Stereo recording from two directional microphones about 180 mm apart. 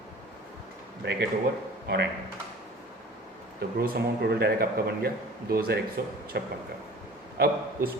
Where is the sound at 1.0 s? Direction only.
75° right (ahead or behind).